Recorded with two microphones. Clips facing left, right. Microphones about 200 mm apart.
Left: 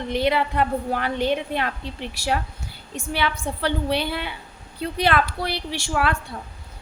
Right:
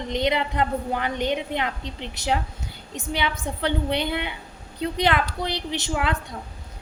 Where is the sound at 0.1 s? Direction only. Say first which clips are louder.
Left 2 dB; 20° right (ahead or behind).